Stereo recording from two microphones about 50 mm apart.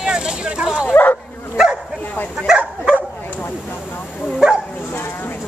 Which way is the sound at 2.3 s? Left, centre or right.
Centre.